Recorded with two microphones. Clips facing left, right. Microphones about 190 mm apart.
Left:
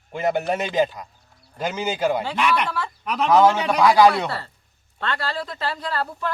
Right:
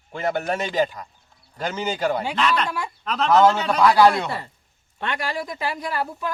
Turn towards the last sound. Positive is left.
turn(degrees=-15)  # may be behind; listen again after turning